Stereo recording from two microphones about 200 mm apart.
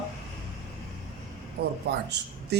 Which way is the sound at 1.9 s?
55° right (ahead or behind).